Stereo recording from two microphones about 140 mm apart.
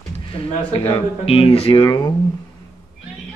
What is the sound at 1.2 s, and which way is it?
Speech, 40° left (ahead or behind).